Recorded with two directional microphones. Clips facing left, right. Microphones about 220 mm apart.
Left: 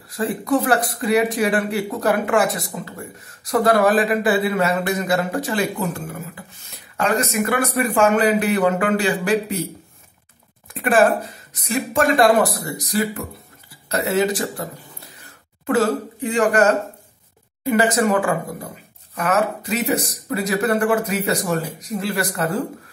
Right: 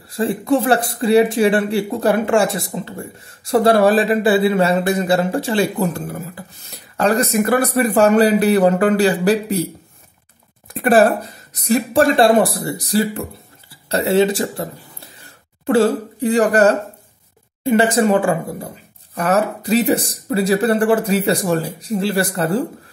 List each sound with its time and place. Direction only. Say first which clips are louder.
0.1 s speech: right 3 dB; 30° right (ahead or behind)
10.7 s speech: right 3 dB; 40° right (ahead or behind)